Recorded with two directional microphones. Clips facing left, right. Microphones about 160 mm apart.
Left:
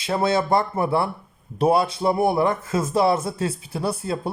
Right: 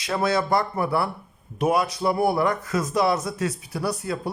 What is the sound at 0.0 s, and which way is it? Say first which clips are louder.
Speech: left 2 dB; 25° left (ahead or behind).